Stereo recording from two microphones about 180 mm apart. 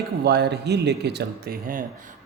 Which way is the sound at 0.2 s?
65° right (ahead or behind).